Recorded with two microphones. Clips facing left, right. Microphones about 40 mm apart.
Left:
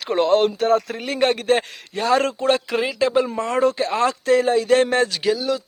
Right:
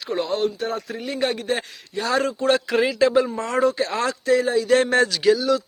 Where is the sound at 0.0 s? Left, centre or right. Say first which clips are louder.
Left 7 dB; left.